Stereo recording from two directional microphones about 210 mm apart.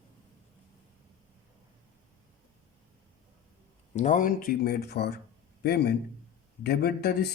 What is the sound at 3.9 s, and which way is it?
Speech, 35° left (ahead or behind).